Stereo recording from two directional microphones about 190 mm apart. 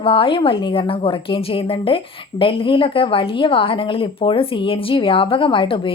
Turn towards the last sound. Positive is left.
turn(degrees=25)  # may be behind; listen again after turning